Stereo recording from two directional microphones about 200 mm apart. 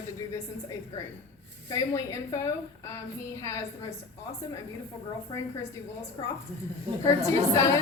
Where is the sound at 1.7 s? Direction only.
15° left (ahead or behind).